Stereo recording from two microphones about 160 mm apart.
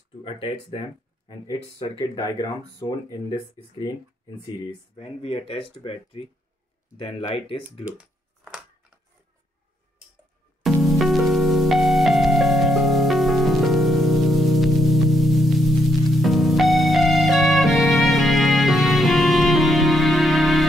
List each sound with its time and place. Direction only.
0.2 s speech: 35° left (ahead or behind)
4.9 s speech: 40° left (ahead or behind)
10.6 s music: centre (ahead or behind)